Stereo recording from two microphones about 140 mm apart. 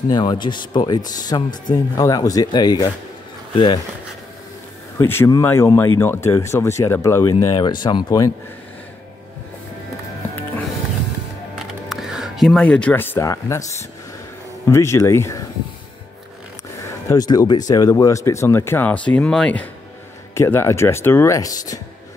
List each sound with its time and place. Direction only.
0.1 s speech: 35° left (ahead or behind)
4.9 s speech: 20° left (ahead or behind)
11.5 s music: 5° right (ahead or behind); by 13.8 s 20° left (ahead or behind)
14.7 s speech: 20° left (ahead or behind)
17.1 s speech: 25° left (ahead or behind); by 19.7 s 5° left (ahead or behind)
20.3 s speech: 20° left (ahead or behind)